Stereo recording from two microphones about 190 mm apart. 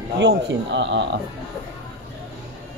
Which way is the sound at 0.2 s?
70° right (ahead or behind).